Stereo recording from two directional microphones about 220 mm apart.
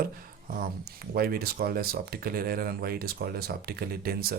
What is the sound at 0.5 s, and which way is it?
Speech, 40° right (ahead or behind).